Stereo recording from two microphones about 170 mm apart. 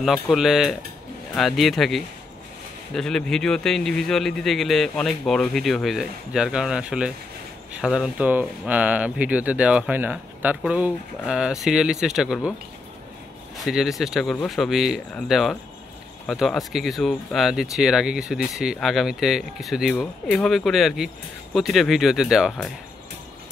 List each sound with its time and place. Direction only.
0.0 s speech: centre (ahead or behind)
13.7 s speech: centre (ahead or behind)